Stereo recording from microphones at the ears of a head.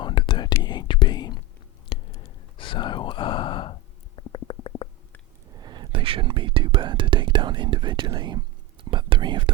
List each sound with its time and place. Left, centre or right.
0.0 s whispering: left
1.9 s sigh: left
5.5 s whispering: right